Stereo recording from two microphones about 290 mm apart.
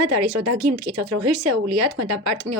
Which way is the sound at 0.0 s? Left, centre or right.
Right.